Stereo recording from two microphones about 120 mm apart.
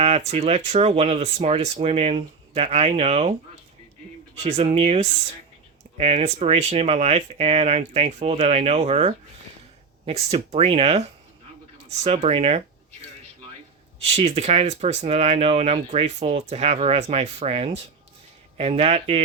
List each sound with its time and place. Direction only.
0.0 s speech: 65° right (ahead or behind)
4.4 s speech: 55° right (ahead or behind)
10.3 s speech: 55° right (ahead or behind)
14.0 s speech: 55° right (ahead or behind)